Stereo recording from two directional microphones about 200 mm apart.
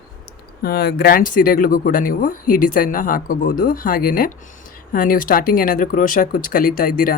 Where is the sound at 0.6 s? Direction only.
50° left (ahead or behind).